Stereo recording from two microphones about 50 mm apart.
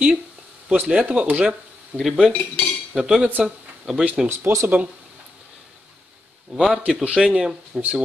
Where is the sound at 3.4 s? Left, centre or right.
Centre.